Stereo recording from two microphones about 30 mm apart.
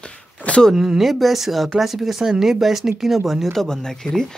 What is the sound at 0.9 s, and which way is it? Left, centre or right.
Speech, centre.